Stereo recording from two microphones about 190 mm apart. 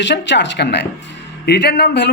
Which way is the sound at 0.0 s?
70° left (ahead or behind).